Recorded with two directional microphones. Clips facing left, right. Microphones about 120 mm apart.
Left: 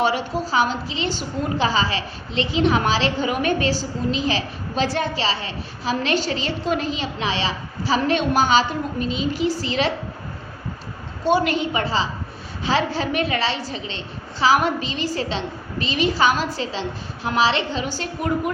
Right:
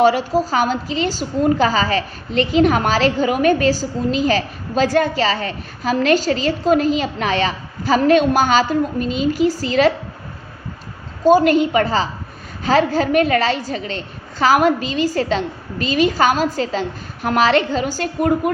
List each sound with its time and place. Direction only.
0.0 s a woman's voice: 40° right (ahead or behind)
11.2 s a woman's voice: 40° right (ahead or behind)